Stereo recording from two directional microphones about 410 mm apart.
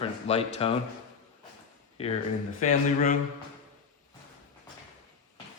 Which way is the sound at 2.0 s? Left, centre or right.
Centre.